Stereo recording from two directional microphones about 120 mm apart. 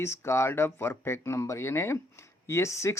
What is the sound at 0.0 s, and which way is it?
Speech, 20° left (ahead or behind).